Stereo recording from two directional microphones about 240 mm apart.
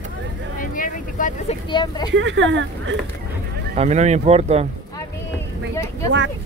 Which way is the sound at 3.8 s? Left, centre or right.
Right.